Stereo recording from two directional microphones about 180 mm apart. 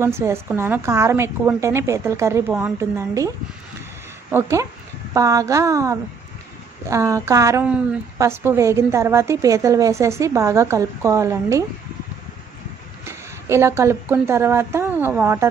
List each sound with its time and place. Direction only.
0.0 s a woman's voice: 15° right (ahead or behind)
4.3 s a woman's voice: 15° right (ahead or behind)
13.0 s speech: 15° right (ahead or behind)